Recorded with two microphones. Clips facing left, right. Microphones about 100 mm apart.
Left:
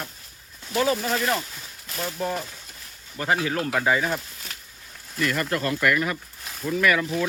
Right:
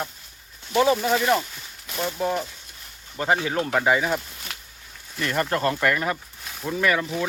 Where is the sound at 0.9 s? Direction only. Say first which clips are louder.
Right 4 dB; centre (ahead or behind).